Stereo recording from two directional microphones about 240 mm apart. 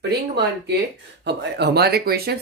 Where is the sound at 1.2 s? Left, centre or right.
Right.